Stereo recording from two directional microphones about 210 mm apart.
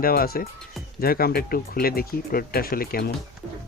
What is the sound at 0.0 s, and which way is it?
Speech, 45° left (ahead or behind).